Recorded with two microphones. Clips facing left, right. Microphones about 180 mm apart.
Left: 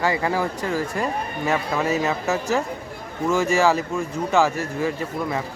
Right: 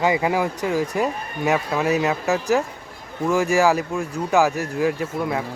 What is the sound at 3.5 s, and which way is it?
Speech, 5° right (ahead or behind).